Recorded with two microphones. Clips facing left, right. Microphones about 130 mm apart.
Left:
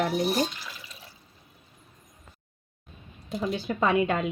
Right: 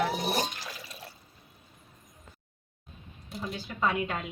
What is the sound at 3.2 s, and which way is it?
Speech, 75° left (ahead or behind).